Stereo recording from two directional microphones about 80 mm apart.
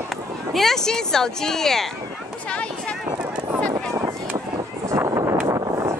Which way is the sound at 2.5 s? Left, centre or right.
Centre.